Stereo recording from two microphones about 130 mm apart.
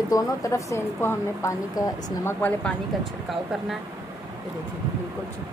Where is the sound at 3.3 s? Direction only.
Centre (ahead or behind).